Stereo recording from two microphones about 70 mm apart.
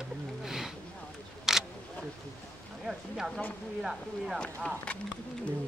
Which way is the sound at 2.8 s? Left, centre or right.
Centre.